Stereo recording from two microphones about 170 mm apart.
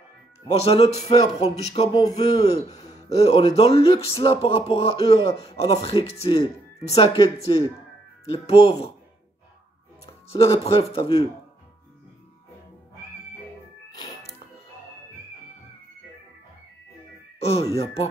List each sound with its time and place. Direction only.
0.6 s speech: 35° left (ahead or behind)
2.0 s a man's voice: 25° left (ahead or behind)
3.3 s speech: 35° left (ahead or behind)
10.3 s speech: 35° left (ahead or behind)
17.5 s speech: 35° left (ahead or behind)